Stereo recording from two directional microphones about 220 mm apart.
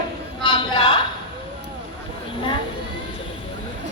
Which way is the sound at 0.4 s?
20° left (ahead or behind).